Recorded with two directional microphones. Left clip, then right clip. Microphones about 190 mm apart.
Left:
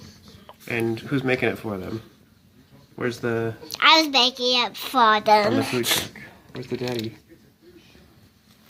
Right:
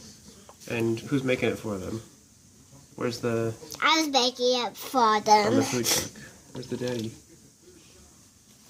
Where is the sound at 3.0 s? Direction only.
5° left (ahead or behind).